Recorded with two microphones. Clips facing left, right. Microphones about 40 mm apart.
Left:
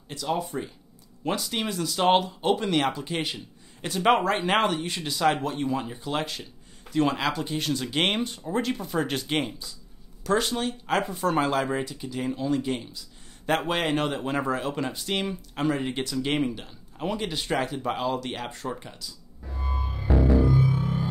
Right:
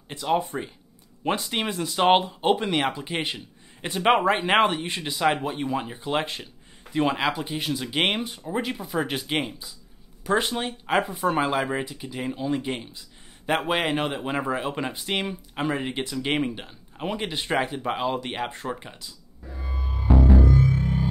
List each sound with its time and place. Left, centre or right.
0.1 s speech: right; by 9.6 s centre
10.2 s speech: right
19.5 s music: centre